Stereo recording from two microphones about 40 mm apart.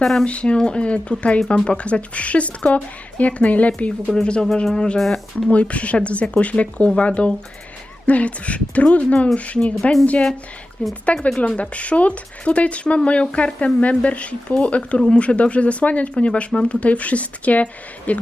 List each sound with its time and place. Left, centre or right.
0.0 s speech: centre
0.3 s speech: left
4.9 s speech: centre
5.5 s speech: left
11.0 s speech: left